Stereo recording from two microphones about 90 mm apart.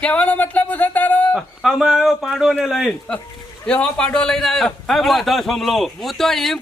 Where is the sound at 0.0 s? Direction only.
15° left (ahead or behind).